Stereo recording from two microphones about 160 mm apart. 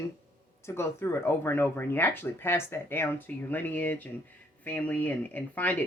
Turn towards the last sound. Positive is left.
turn(degrees=10)  # may be behind; listen again after turning